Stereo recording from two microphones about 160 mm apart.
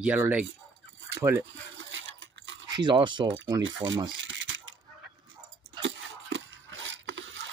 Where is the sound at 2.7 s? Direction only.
30° right (ahead or behind).